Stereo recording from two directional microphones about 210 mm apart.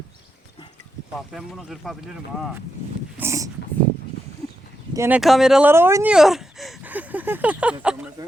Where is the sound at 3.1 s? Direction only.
15° right (ahead or behind).